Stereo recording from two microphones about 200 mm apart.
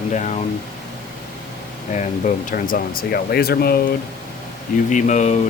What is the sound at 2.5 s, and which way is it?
Speech, 45° left (ahead or behind).